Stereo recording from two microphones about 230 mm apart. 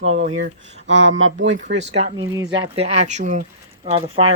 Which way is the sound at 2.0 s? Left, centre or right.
Right.